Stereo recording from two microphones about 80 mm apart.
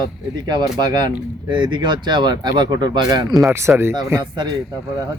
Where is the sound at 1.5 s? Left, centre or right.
Right.